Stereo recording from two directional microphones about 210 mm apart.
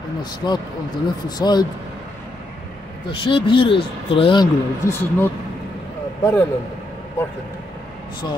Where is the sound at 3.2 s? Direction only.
25° left (ahead or behind).